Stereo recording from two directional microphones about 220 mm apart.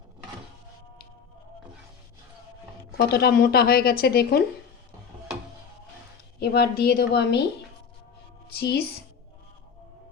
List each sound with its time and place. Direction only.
3.1 s speech: 45° left (ahead or behind)
6.4 s speech: 45° left (ahead or behind)
8.5 s speech: 45° left (ahead or behind)